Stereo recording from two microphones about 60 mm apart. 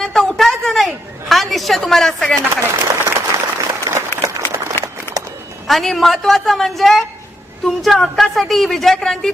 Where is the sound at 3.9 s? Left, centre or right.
Right.